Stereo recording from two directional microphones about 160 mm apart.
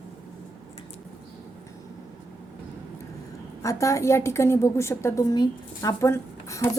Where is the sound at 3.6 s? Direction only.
20° left (ahead or behind).